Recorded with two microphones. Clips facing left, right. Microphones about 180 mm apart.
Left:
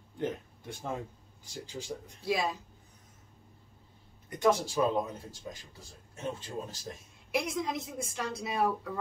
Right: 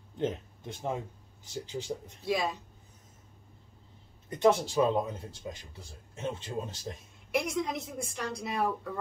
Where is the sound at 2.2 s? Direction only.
Centre (ahead or behind).